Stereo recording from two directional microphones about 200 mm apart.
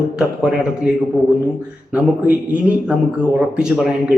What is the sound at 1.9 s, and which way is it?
A man's voice, 5° right (ahead or behind).